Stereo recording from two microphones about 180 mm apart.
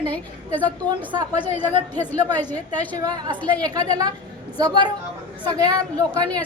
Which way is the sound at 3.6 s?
20° right (ahead or behind).